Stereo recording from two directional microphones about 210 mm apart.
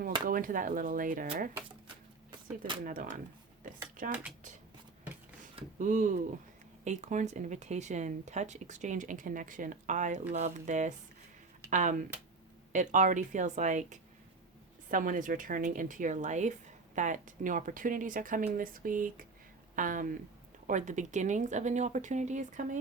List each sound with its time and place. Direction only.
0.3 s a woman's voice: 40° right (ahead or behind)
2.8 s a woman's voice: 40° right (ahead or behind)
5.8 s a woman's voice: 35° right (ahead or behind)